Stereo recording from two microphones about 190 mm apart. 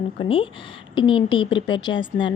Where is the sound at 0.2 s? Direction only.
30° left (ahead or behind).